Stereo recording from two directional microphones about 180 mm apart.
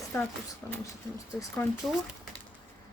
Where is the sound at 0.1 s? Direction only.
15° left (ahead or behind).